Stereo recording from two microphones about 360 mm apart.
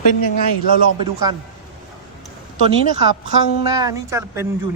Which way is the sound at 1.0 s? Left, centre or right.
Centre.